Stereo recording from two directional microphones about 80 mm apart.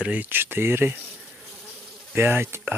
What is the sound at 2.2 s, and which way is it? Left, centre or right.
Speech, right.